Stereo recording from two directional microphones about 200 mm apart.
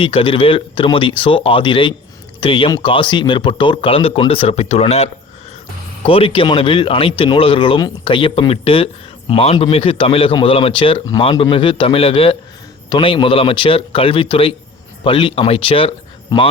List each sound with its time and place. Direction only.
0.0 s speech: 25° left (ahead or behind)